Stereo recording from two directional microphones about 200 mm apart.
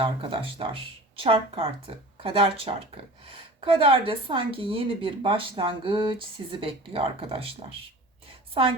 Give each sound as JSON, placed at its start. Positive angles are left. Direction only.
{"t": 0.0, "sound": "speech", "side_deg": -25}